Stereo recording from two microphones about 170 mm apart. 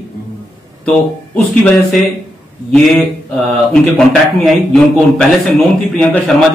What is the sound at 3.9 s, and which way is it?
A man's voice, centre (ahead or behind).